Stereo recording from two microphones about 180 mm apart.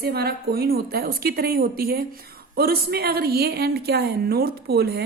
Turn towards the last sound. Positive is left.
turn(degrees=-60)  # may be behind; listen again after turning